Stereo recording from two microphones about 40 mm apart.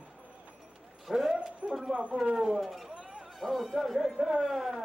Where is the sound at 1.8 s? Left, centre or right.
Right.